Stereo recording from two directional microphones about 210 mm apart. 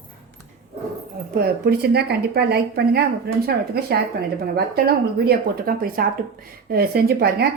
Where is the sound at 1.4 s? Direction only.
50° right (ahead or behind).